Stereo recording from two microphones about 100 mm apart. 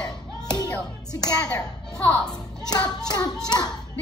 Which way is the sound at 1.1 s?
40° left (ahead or behind).